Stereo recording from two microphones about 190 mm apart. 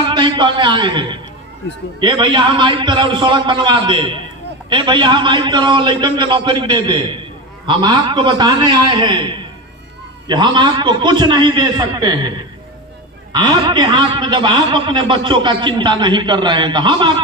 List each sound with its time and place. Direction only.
0.1 s a man's voice: 25° right (ahead or behind)